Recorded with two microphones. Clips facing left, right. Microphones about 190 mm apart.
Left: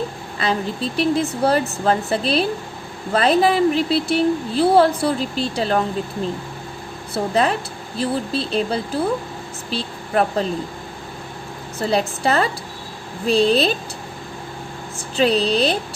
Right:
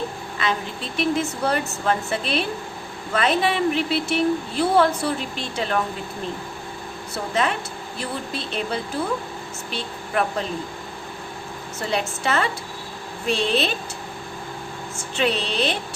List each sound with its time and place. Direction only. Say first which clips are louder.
0.3 s a woman's voice: left 5 dB; 35° left (ahead or behind)
7.1 s a woman's voice: left 5 dB; 35° left (ahead or behind)
11.8 s a woman's voice: left 5 dB; 35° left (ahead or behind)
15.1 s a woman's voice: left 6 dB; 35° left (ahead or behind)